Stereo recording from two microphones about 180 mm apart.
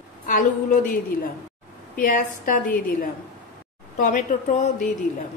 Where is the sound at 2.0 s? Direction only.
50° left (ahead or behind).